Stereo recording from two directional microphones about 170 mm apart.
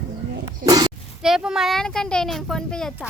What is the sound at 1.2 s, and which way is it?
Speech, 5° right (ahead or behind).